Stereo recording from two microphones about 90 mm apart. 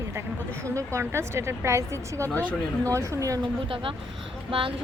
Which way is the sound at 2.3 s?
15° left (ahead or behind).